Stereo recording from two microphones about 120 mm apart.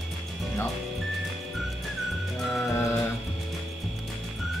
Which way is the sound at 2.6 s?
25° left (ahead or behind).